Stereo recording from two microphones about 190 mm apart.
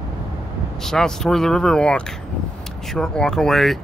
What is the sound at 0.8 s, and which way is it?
Speech, 5° left (ahead or behind).